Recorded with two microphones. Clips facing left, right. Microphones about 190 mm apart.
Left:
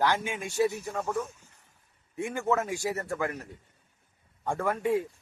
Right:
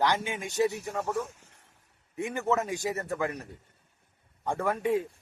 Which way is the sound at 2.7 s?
15° right (ahead or behind).